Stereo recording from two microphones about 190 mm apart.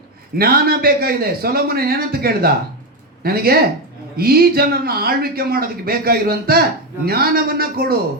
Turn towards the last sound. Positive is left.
turn(degrees=-50)  # may be behind; listen again after turning